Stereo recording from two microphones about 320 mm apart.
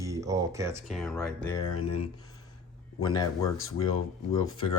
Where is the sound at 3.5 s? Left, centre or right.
Left.